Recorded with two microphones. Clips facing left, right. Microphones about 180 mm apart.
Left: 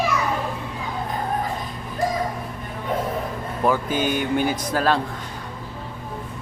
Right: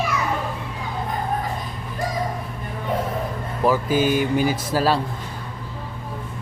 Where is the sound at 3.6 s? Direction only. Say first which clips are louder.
Right 2 dB; 5° right (ahead or behind).